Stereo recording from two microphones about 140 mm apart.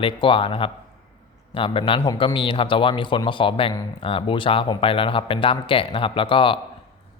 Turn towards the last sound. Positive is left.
turn(degrees=35)  # may be behind; listen again after turning